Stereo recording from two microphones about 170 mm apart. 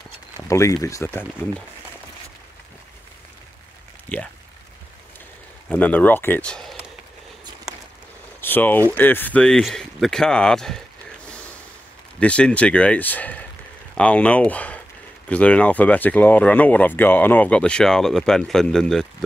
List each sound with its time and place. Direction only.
0.5 s speech: 20° left (ahead or behind)
4.1 s speech: 10° left (ahead or behind)
5.7 s speech: 10° left (ahead or behind)
8.4 s boiling: 10° left (ahead or behind)
8.9 s speech: 10° left (ahead or behind)
12.2 s speech: 5° left (ahead or behind)